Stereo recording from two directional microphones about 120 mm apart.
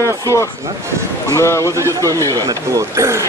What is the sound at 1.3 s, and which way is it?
Speech, 25° left (ahead or behind).